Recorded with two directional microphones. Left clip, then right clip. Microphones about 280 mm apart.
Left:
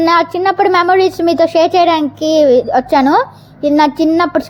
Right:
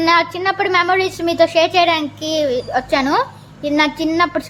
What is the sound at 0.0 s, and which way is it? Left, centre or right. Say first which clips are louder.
Speech: left 4 dB; centre.